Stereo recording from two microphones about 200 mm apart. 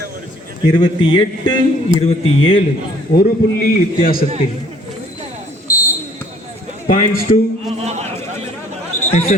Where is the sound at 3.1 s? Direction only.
45° left (ahead or behind).